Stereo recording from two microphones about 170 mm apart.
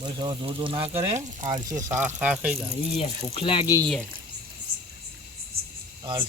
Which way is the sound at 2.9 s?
40° left (ahead or behind).